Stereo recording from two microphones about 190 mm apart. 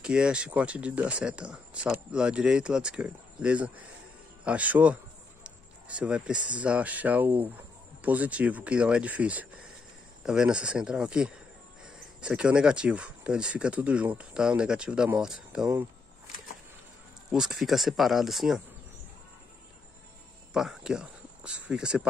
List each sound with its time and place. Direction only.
0.0 s speech: 5° right (ahead or behind)
17.3 s speech: centre (ahead or behind)
20.5 s speech: 5° right (ahead or behind)